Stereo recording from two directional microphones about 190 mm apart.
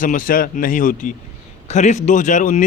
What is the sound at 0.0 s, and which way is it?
Speech, 45° left (ahead or behind).